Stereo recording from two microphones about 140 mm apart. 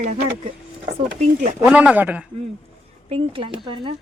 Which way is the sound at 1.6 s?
10° right (ahead or behind).